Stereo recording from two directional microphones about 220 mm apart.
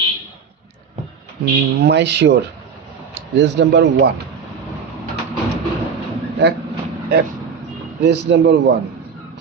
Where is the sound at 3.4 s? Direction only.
50° right (ahead or behind).